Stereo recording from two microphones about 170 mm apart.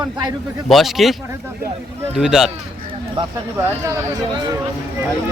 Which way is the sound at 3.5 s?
15° right (ahead or behind).